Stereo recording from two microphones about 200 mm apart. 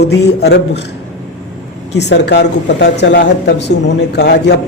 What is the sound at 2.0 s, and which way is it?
Speech, 60° left (ahead or behind).